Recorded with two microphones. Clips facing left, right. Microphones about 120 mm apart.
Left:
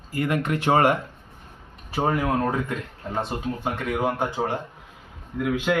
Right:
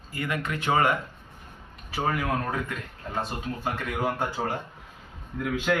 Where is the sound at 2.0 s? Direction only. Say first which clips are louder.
Left 4 dB; 25° left (ahead or behind).